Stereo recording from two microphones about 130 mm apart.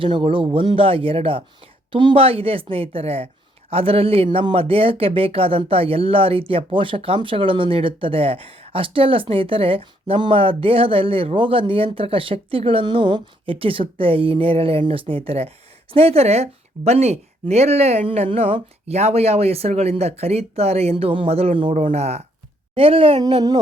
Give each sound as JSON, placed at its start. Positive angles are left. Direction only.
{"t": 0.0, "sound": "speech", "side_deg": -40}